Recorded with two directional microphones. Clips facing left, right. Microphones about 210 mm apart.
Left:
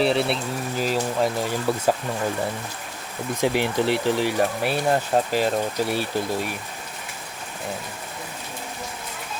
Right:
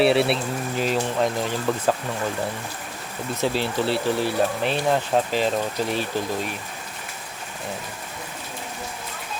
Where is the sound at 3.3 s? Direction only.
15° left (ahead or behind).